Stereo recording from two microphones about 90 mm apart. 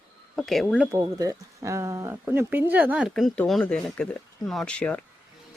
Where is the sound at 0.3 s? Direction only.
5° left (ahead or behind).